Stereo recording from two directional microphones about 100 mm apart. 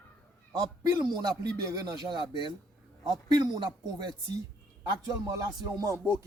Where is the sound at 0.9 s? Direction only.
45° right (ahead or behind).